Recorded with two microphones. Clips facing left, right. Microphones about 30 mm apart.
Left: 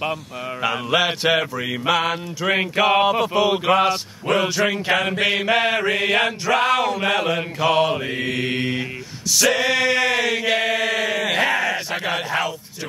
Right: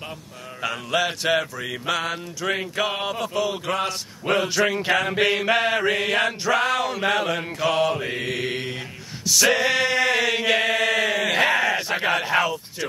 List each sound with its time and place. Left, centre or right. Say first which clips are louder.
0.6 s mantra: left 4 dB; centre
2.7 s a sound: left 8 dB; left
4.3 s mantra: left 2 dB; centre
10.3 s chant: left 1 dB; centre
12.1 s mantra: right 2 dB; centre